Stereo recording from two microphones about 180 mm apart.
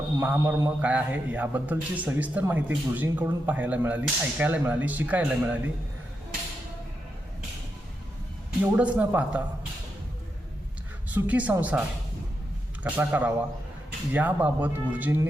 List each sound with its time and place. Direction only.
0.2 s a man's voice: 15° right (ahead or behind)
8.6 s a man's voice: 10° right (ahead or behind)
11.1 s a man's voice: 10° right (ahead or behind)
12.8 s a man's voice: 10° right (ahead or behind)